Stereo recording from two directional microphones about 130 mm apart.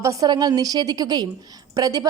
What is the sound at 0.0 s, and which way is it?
A woman's voice, 25° right (ahead or behind).